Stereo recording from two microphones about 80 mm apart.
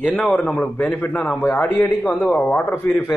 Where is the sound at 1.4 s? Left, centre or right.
Left.